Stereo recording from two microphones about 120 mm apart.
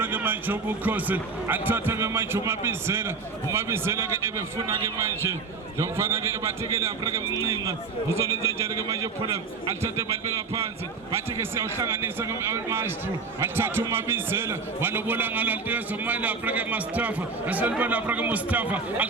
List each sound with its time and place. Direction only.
0.0 s a man's voice: 15° right (ahead or behind)